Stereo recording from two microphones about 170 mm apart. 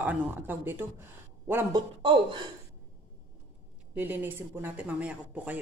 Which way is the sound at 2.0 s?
30° right (ahead or behind).